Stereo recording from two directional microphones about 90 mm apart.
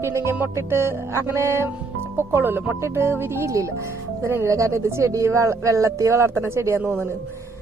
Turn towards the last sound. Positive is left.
turn(degrees=-30)  # may be behind; listen again after turning